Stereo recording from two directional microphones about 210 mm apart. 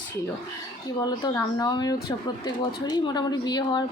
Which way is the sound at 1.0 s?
20° left (ahead or behind).